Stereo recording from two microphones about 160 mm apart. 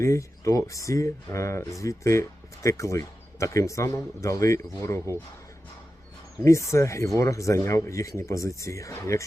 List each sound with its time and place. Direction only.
0.0 s speech: 20° left (ahead or behind)
6.4 s speech: 20° left (ahead or behind)